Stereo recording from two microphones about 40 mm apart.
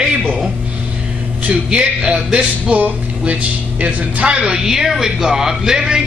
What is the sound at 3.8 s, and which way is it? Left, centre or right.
Speech, right.